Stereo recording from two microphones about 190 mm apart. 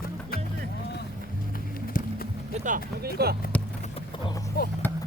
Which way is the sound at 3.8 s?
30° left (ahead or behind).